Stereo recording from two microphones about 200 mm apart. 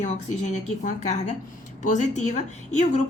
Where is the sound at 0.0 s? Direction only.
35° left (ahead or behind).